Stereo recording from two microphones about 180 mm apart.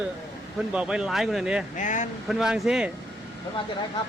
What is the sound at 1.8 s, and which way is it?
Speech, 45° left (ahead or behind).